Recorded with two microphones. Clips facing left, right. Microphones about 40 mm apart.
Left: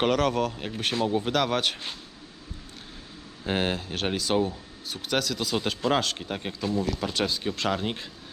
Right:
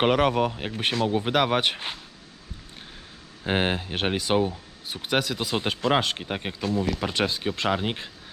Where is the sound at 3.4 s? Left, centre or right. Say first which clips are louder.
Right 2 dB; right.